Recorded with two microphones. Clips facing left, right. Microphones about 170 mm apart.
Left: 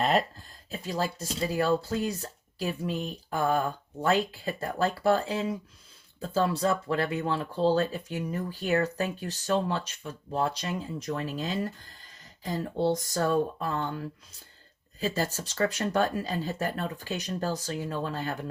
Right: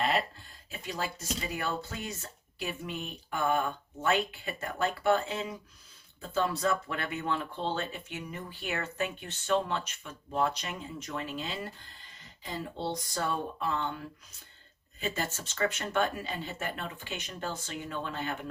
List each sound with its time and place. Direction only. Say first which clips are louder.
0.7 s speech: left 5 dB; 35° left (ahead or behind)
12.9 s speech: left 5 dB; 45° left (ahead or behind)
15.0 s speech: left 5 dB; 35° left (ahead or behind)